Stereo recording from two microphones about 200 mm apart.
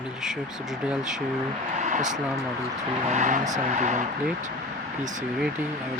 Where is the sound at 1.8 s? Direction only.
40° right (ahead or behind).